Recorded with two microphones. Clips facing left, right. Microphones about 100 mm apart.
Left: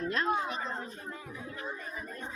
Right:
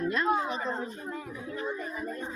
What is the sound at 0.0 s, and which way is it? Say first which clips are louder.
Speech: right 3 dB; 15° right (ahead or behind).